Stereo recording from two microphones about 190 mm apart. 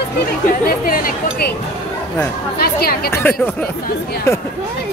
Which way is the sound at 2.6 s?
55° left (ahead or behind).